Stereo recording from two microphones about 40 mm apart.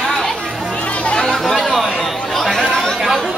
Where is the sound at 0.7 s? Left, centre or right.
Left.